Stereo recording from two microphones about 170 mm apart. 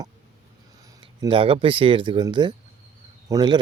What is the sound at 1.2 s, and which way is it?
Speech, 30° right (ahead or behind).